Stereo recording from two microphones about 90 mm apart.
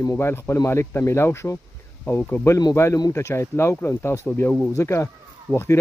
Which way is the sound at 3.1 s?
30° left (ahead or behind).